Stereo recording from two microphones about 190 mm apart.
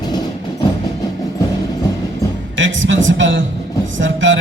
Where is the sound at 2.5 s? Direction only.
80° right.